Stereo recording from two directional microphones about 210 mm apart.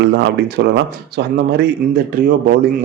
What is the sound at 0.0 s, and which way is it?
A man's voice, 50° right (ahead or behind).